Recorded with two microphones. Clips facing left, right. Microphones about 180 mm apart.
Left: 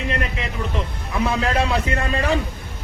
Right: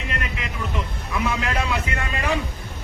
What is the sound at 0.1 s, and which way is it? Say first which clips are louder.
Vehicle: left 3 dB; 35° left (ahead or behind).